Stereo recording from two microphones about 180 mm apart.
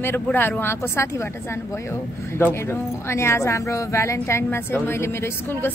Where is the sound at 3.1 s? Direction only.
15° left (ahead or behind).